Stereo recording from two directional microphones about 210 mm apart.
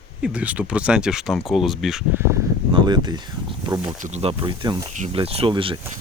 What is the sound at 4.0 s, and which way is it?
Speech, 35° right (ahead or behind).